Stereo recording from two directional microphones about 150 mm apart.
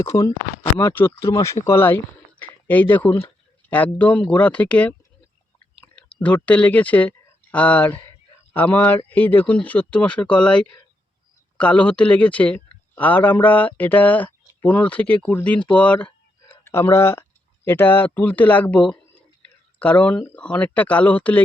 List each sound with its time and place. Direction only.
0.0 s speech: 20° left (ahead or behind)